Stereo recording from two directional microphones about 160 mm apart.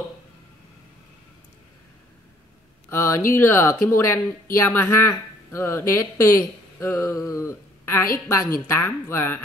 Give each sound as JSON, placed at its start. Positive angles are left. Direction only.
{"t": 2.9, "sound": "a woman's voice", "side_deg": 15}